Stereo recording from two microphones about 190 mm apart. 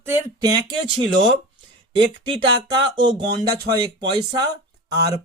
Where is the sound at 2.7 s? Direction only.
20° right (ahead or behind).